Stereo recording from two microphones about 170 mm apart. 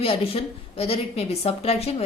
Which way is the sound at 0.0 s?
35° left (ahead or behind).